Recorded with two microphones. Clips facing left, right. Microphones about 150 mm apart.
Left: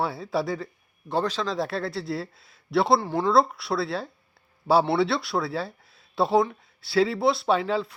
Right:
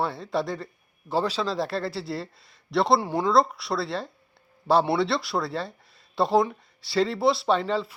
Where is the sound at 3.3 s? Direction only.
Centre (ahead or behind).